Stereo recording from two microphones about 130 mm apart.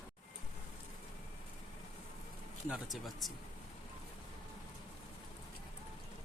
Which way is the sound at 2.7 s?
Centre (ahead or behind).